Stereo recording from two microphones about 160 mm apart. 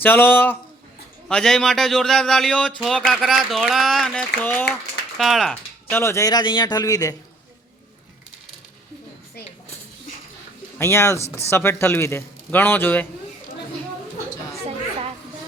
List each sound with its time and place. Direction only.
0.0 s a man's voice: 15° left (ahead or behind)
5.1 s speech: centre (ahead or behind)
6.0 s a man's voice: 20° left (ahead or behind)
10.8 s a man's voice: 15° left (ahead or behind)